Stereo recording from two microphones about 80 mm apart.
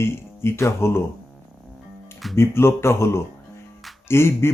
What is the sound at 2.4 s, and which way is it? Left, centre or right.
Speech, left.